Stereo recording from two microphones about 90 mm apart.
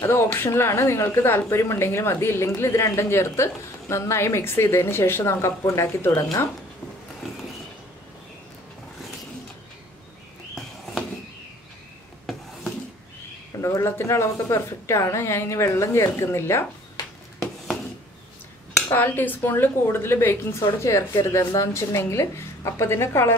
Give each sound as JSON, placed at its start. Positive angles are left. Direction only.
{"t": 0.0, "sound": "speech", "side_deg": 30}
{"t": 13.6, "sound": "a woman's voice", "side_deg": 35}
{"t": 18.9, "sound": "a woman's voice", "side_deg": 20}